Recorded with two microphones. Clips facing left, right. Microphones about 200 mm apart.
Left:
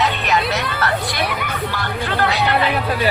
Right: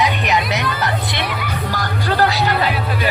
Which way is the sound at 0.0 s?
15° right (ahead or behind).